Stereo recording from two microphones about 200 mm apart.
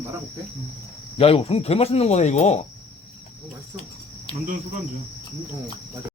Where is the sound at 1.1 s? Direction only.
30° left (ahead or behind).